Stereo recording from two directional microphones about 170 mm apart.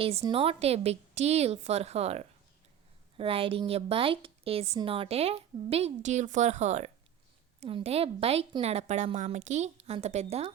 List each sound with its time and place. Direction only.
0.0 s a woman's voice: 35° right (ahead or behind)